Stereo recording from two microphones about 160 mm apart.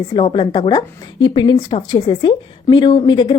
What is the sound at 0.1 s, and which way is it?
A woman's voice, 30° left (ahead or behind).